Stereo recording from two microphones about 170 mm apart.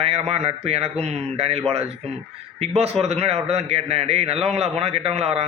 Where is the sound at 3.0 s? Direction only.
40° right (ahead or behind).